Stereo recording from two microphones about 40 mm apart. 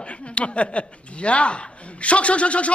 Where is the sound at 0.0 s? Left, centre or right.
Left.